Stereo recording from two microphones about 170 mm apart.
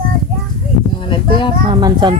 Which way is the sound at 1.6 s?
25° right (ahead or behind).